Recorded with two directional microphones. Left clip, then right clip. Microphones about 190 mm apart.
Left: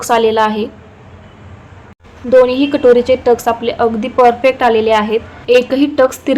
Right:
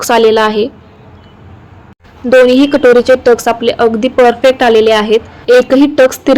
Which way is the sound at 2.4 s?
30° right (ahead or behind).